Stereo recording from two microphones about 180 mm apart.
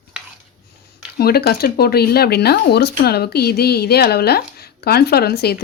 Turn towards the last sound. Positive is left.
turn(degrees=60)  # may be behind; listen again after turning